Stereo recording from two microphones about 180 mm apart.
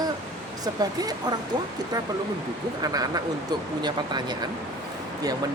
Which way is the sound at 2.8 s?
20° right (ahead or behind).